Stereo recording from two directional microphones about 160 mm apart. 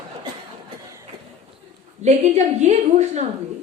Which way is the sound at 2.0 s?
45° right (ahead or behind).